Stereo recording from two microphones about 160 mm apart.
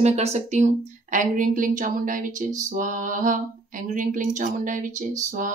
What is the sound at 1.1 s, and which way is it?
Speech, 55° right (ahead or behind).